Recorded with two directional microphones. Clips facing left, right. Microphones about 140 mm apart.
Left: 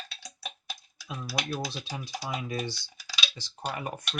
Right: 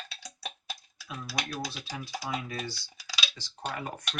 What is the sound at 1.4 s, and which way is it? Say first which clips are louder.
Speech: left 3 dB; 20° left (ahead or behind).